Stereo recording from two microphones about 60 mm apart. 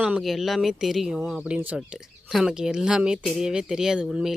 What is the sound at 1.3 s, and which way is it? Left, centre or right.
Speech, centre.